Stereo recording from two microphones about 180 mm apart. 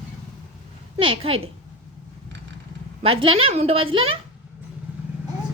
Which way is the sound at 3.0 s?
30° right (ahead or behind).